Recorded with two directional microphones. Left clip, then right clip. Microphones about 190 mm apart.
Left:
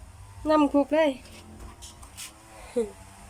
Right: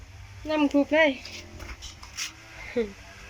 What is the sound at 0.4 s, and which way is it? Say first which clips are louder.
Speech: left 2 dB; 15° left (ahead or behind).